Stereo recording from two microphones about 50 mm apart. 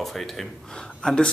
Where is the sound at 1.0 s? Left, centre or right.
Centre.